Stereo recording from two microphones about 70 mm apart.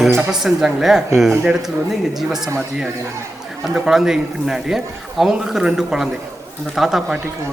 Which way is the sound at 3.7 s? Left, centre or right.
Centre.